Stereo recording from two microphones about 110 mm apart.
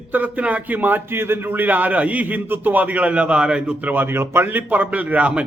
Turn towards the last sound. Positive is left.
turn(degrees=-10)  # may be behind; listen again after turning